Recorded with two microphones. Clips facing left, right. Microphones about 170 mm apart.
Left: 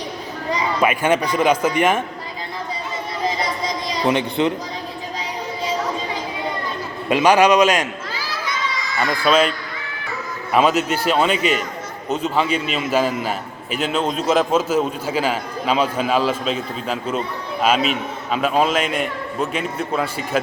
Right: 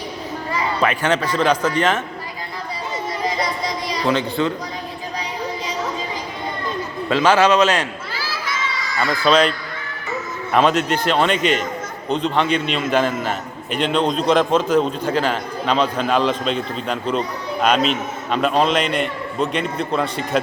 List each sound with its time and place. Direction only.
0.5 s speech: 10° left (ahead or behind)
4.0 s speech: 20° left (ahead or behind)
7.1 s speech: 15° left (ahead or behind)
9.2 s speech: 5° left (ahead or behind)
10.5 s a man's voice: 5° left (ahead or behind)